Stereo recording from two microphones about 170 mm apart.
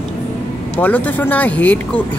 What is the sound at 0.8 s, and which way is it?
Speech, 10° left (ahead or behind).